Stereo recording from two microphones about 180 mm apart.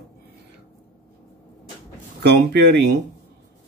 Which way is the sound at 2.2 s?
65° right (ahead or behind).